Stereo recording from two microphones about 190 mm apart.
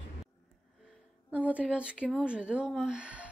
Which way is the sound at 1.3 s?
5° right (ahead or behind).